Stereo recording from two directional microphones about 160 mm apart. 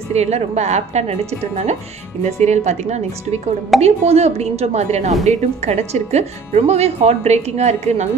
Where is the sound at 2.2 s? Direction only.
45° right (ahead or behind).